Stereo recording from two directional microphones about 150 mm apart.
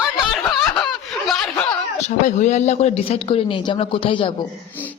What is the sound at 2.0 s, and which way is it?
Speech, 50° left (ahead or behind).